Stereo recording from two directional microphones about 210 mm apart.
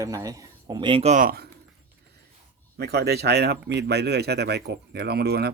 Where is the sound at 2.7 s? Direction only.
50° right (ahead or behind).